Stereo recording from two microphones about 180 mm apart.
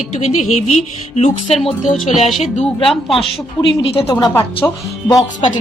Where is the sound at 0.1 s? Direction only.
40° left (ahead or behind).